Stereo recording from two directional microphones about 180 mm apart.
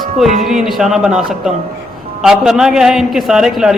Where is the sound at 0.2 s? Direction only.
Centre (ahead or behind).